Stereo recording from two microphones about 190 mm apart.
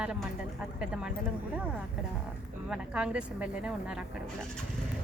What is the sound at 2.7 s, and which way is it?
Speech, 5° right (ahead or behind).